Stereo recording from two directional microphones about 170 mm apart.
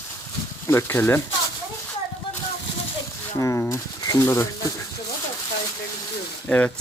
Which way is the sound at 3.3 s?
20° left (ahead or behind).